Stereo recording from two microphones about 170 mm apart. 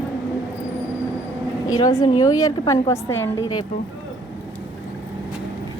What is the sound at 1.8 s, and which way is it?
A woman's voice, 25° left (ahead or behind).